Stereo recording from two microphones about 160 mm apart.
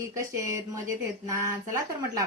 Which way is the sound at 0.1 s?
20° right (ahead or behind).